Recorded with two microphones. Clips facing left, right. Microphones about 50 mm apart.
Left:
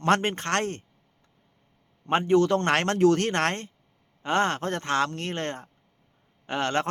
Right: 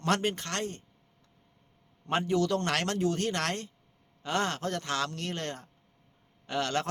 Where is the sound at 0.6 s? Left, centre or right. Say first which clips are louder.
Left 5 dB; left.